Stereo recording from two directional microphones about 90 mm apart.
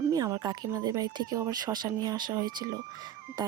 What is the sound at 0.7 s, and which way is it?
Speech, 40° right (ahead or behind).